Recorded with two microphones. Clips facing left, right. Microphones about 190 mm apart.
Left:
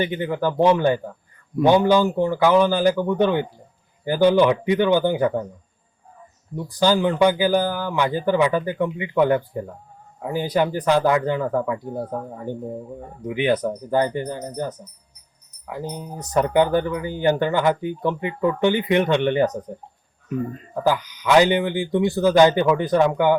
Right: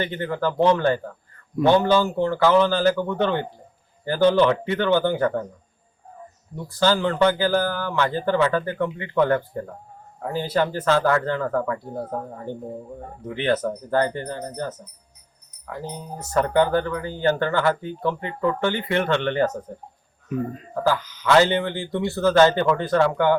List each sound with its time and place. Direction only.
0.0 s speech: 15° left (ahead or behind)
6.6 s speech: 15° left (ahead or behind)
20.8 s speech: 15° left (ahead or behind)